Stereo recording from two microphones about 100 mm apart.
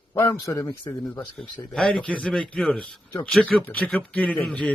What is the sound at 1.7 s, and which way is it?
A man's voice, 5° left (ahead or behind).